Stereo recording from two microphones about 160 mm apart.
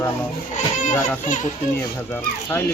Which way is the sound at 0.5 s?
50° left (ahead or behind).